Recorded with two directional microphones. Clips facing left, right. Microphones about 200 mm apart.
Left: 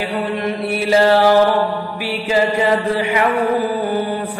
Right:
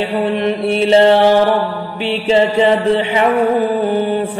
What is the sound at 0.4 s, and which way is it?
Music, 25° right (ahead or behind).